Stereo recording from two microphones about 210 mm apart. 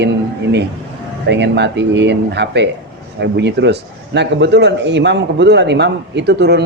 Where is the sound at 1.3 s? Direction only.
55° right (ahead or behind).